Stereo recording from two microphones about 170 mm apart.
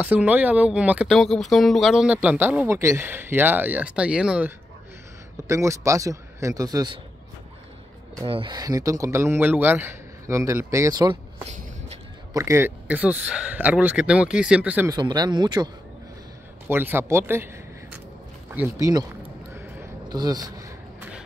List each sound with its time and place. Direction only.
0.0 s a man's voice: 10° right (ahead or behind); by 7.0 s 25° right (ahead or behind)
8.2 s speech: 30° right (ahead or behind)
11.4 s shuffle: 40° right (ahead or behind)
12.4 s speech: 15° right (ahead or behind)
14.9 s a man's voice: 25° right (ahead or behind)
16.6 s speech: 15° right (ahead or behind)
18.5 s speech: 15° right (ahead or behind)
20.1 s a sound: 25° right (ahead or behind)